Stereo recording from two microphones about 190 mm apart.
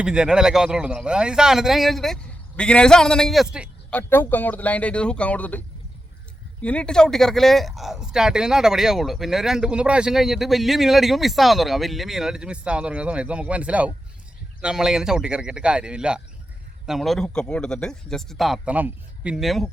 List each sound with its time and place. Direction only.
0.0 s speech: 5° right (ahead or behind)
3.8 s speech: 10° left (ahead or behind)